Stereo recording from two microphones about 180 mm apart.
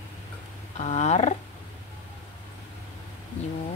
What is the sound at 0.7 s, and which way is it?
Wild animals, 35° left (ahead or behind).